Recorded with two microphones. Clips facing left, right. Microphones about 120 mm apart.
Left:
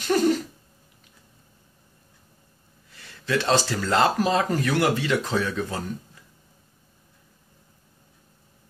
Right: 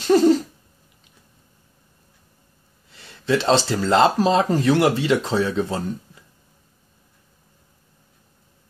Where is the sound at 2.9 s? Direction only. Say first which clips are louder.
Right 5 dB; 25° right (ahead or behind).